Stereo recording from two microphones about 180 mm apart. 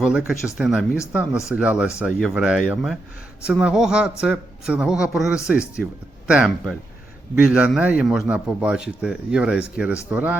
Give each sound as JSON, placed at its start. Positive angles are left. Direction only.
{"t": 0.0, "sound": "a man's voice", "side_deg": -5}